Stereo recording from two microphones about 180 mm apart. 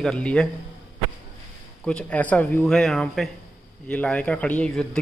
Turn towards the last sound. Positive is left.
turn(degrees=5)  # may be behind; listen again after turning